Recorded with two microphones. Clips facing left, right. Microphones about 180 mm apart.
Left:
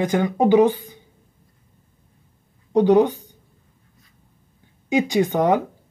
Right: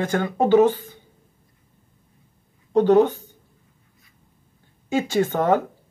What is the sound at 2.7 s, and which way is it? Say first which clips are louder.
Speech: even; 15° left (ahead or behind).